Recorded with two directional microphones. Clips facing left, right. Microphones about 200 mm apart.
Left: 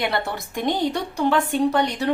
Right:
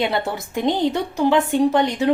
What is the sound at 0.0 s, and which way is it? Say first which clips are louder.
A woman's voice: right 3 dB; 20° right (ahead or behind).